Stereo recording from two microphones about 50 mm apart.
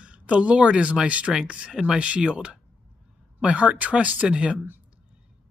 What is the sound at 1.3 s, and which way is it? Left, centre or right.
Speech, right.